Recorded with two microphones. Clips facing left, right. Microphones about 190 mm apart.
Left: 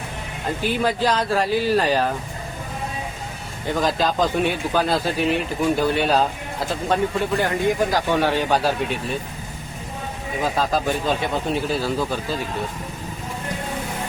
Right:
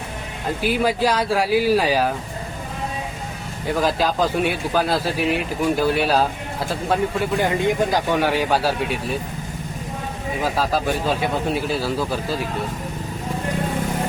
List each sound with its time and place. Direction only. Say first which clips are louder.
0.6 s speech: right 2 dB; 10° right (ahead or behind)
3.8 s speech: even; 5° right (ahead or behind)
7.4 s speech: right 1 dB; 20° right (ahead or behind)
8.1 s speech: even; 10° right (ahead or behind)
10.4 s speech: even; 5° right (ahead or behind)